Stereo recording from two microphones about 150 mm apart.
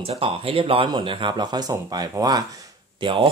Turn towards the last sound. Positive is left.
turn(degrees=-35)  # may be behind; listen again after turning